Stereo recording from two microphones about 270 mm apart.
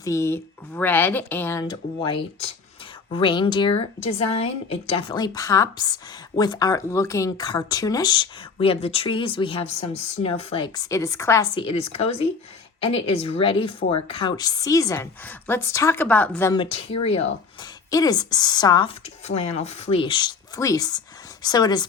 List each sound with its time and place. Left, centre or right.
0.0 s speech: centre